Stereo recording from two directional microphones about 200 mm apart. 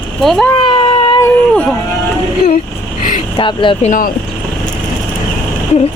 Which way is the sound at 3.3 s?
25° left (ahead or behind).